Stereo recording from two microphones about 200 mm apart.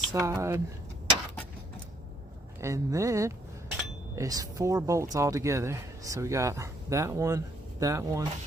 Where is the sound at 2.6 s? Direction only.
15° right (ahead or behind).